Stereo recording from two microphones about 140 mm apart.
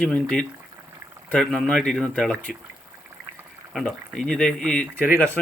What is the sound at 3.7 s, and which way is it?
Speech, 5° left (ahead or behind).